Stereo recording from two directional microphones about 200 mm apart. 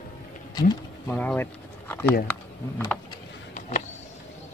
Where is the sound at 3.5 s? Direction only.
35° left (ahead or behind).